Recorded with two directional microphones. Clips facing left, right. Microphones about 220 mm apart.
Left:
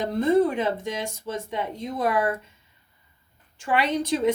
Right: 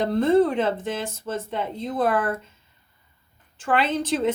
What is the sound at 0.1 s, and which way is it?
Speech, 10° left (ahead or behind).